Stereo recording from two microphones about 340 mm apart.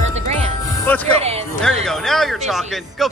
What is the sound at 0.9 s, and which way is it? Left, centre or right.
Speech, centre.